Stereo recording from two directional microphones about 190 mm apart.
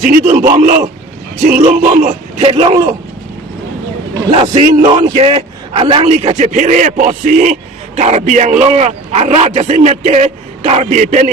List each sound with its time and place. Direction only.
0.0 s a man's voice: 40° right (ahead or behind)
2.4 s a man's voice: 30° right (ahead or behind)
4.3 s a man's voice: 30° right (ahead or behind)